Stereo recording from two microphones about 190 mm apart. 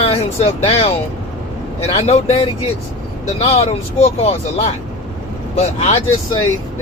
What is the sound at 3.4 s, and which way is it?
Speech, 35° left (ahead or behind).